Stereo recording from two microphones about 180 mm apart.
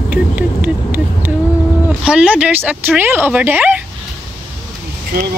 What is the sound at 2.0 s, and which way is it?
Speech, 5° right (ahead or behind).